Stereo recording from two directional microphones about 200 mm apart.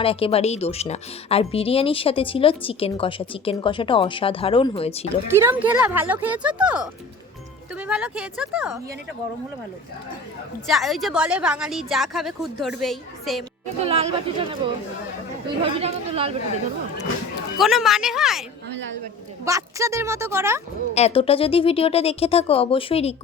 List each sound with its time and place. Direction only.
0.0 s speech: 30° left (ahead or behind)
5.3 s a woman's voice: 10° right (ahead or behind)
10.7 s a woman's voice: centre (ahead or behind)
13.8 s speech: 30° right (ahead or behind)
17.6 s a woman's voice: centre (ahead or behind)
19.5 s speech: 15° right (ahead or behind)
20.9 s speech: 30° left (ahead or behind)